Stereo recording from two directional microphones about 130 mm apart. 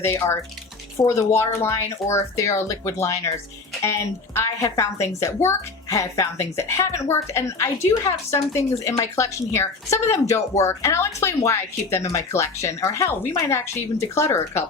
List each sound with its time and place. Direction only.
0.0 s speech: 20° left (ahead or behind)
4.4 s speech: 20° left (ahead or behind)